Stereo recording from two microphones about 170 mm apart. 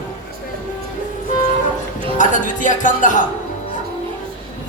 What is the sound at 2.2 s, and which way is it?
Speech, 50° left (ahead or behind).